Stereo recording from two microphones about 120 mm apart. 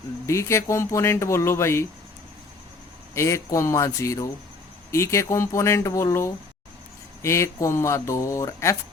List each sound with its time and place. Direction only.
0.3 s speech: 25° left (ahead or behind)
3.2 s speech: 25° left (ahead or behind)